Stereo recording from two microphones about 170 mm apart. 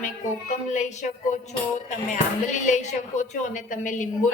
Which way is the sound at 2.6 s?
45° left (ahead or behind).